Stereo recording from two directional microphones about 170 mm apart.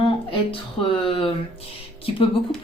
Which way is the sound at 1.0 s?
30° left (ahead or behind).